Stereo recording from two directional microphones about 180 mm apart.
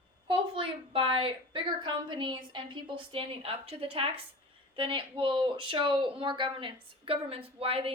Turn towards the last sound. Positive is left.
turn(degrees=-30)  # may be behind; listen again after turning